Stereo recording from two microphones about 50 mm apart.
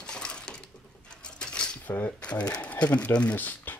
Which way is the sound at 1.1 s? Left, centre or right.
Centre.